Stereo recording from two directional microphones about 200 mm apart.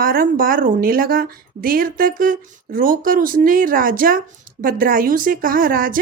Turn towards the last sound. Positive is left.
turn(degrees=-45)  # may be behind; listen again after turning